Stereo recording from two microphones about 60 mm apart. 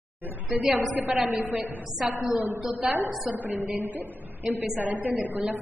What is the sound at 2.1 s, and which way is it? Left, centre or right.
Speech, right.